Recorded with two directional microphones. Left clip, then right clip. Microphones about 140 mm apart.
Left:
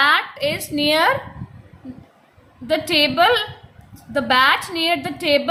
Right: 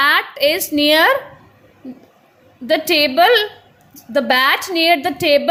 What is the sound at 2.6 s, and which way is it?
A woman's voice, 40° right (ahead or behind).